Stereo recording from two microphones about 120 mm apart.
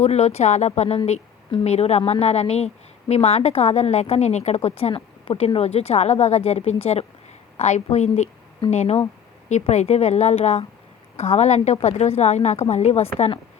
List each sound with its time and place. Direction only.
0.0 s a woman's voice: 60° left (ahead or behind)